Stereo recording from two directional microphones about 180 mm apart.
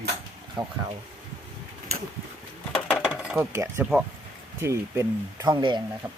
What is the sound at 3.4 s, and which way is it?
Speech, 15° right (ahead or behind).